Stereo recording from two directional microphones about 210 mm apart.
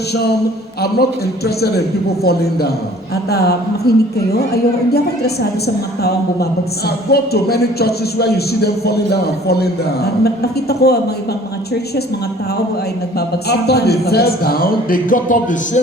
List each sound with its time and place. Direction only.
2.2 s a woman's voice: 50° left (ahead or behind)
13.1 s a woman's voice: 50° left (ahead or behind)